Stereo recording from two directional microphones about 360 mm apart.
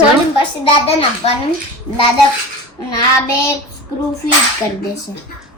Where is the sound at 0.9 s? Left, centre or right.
Centre.